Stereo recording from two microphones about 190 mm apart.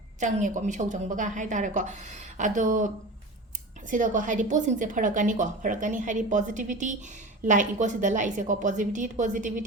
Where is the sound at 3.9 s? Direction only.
45° right (ahead or behind).